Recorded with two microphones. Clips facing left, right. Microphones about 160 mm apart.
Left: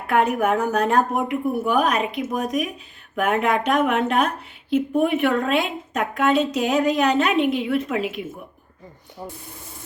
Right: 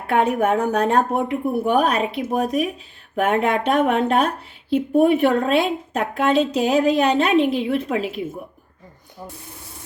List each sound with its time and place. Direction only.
0.1 s a woman's voice: 30° right (ahead or behind)
9.2 s rub: 15° left (ahead or behind)